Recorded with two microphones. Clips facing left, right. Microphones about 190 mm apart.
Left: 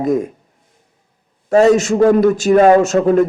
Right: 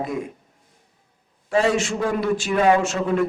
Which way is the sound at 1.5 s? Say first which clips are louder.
Left 9 dB; 45° left (ahead or behind).